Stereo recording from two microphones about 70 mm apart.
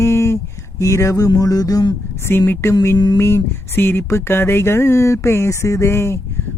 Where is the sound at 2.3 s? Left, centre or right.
Left.